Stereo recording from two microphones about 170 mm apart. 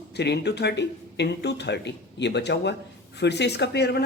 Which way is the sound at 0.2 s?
80° left.